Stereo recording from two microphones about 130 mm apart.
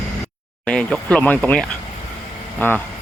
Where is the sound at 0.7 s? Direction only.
5° left (ahead or behind).